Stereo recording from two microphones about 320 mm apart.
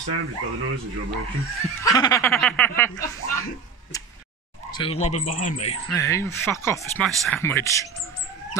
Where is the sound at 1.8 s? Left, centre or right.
Centre.